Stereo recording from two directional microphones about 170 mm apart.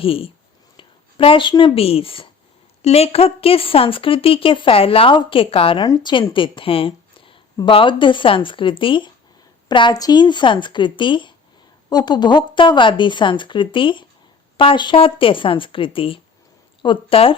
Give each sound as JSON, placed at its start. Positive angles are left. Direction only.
{"t": 0.0, "sound": "a woman's voice", "side_deg": 35}